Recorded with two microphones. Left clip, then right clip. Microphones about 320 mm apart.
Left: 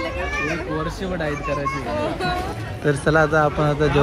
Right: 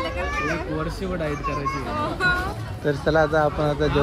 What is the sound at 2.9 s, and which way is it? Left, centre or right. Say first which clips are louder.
A man's voice: left 2 dB; left.